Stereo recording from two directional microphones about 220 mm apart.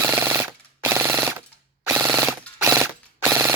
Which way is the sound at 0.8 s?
10° right (ahead or behind).